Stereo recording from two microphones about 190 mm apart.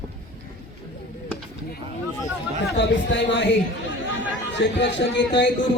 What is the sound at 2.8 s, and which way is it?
Speech, 70° left (ahead or behind).